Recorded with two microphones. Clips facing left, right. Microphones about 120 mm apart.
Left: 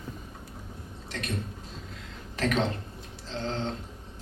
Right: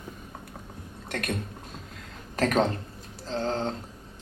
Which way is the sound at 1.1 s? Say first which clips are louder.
Right 4 dB; 55° right (ahead or behind).